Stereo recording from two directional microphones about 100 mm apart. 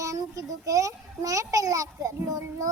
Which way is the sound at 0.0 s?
35° right (ahead or behind).